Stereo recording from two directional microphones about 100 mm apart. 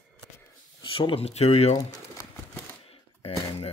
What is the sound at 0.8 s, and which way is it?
Speech, 60° left (ahead or behind).